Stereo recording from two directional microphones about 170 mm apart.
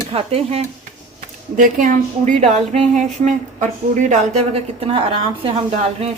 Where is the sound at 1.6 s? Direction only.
50° right (ahead or behind).